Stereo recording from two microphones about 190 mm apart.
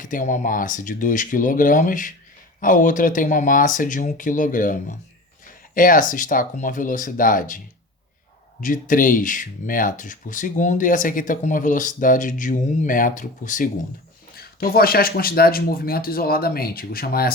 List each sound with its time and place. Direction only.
0.0 s speech: 45° left (ahead or behind)
8.6 s speech: 45° left (ahead or behind)